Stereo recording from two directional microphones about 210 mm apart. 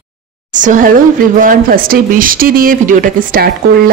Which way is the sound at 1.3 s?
40° right (ahead or behind).